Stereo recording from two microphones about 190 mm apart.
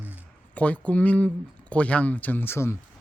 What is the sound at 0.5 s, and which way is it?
Speech, 5° left (ahead or behind).